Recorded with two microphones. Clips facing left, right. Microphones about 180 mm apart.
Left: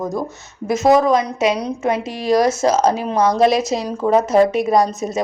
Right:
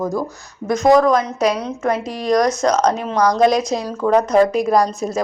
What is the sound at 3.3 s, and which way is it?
Speech, 5° left (ahead or behind).